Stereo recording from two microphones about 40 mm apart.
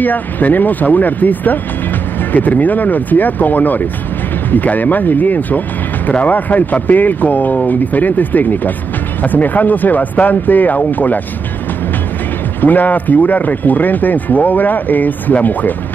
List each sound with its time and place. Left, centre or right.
0.0 s speech: left
12.6 s speech: left